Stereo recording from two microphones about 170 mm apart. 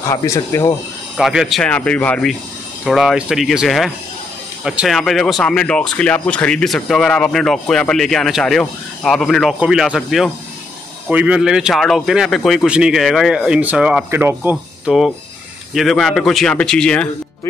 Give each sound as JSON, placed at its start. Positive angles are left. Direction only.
{"t": 0.1, "sound": "speech", "side_deg": 15}
{"t": 1.1, "sound": "speech", "side_deg": 0}